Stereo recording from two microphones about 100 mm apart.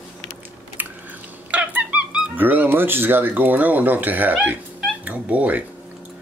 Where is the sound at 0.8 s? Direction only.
20° right (ahead or behind).